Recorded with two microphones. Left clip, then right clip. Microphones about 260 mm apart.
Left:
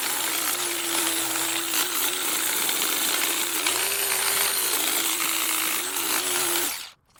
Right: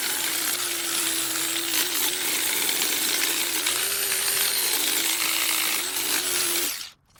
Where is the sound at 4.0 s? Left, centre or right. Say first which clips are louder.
Left 1 dB; left.